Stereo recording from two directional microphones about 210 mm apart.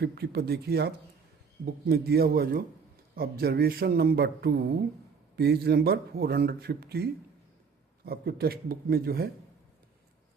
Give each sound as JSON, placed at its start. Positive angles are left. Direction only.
{"t": 0.0, "sound": "speech", "side_deg": -50}